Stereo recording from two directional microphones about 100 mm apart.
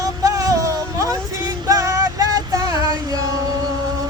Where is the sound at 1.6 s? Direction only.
35° right (ahead or behind).